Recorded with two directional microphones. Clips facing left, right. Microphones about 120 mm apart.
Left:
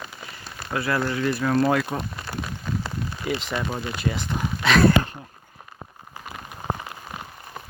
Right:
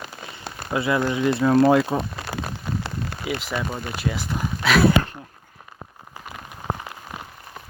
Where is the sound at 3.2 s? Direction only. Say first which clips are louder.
Even; 5° right (ahead or behind).